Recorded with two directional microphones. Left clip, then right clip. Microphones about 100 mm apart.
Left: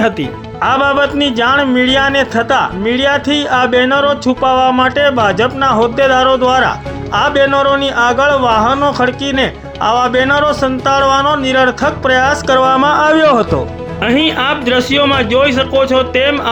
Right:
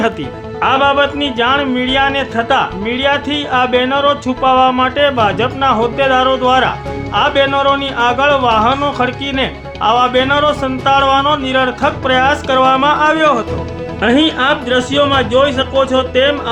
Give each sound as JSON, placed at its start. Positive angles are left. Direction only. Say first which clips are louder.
{"t": 0.6, "sound": "speech", "louder": "even", "side_deg": 70}
{"t": 14.0, "sound": "speech", "louder": "even", "side_deg": 50}